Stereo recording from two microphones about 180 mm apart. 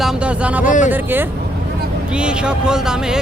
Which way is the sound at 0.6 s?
45° left (ahead or behind).